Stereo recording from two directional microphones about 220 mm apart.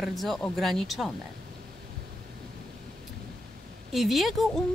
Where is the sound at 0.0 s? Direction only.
Centre (ahead or behind).